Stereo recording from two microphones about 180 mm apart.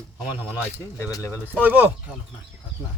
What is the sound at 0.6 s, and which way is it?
Speech, 15° left (ahead or behind).